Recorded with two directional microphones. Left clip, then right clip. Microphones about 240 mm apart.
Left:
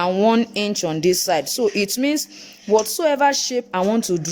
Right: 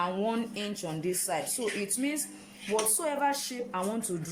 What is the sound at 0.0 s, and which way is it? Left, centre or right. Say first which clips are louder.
Speech: left 13 dB; left.